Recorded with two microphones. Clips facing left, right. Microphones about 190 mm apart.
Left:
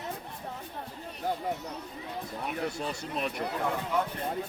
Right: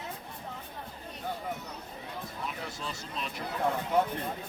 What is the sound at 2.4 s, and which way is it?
Speech, 55° left (ahead or behind).